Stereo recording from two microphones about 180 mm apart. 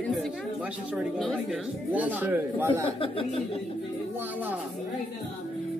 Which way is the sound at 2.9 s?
30° left (ahead or behind).